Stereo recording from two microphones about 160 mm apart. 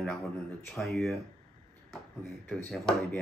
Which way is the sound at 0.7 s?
Centre (ahead or behind).